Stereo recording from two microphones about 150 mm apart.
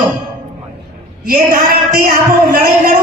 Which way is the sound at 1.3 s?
75° right (ahead or behind).